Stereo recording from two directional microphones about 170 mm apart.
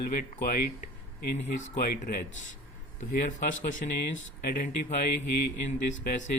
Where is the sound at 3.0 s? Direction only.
45° left (ahead or behind).